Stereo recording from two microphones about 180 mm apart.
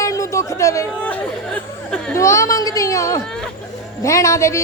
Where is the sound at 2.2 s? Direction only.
15° left (ahead or behind).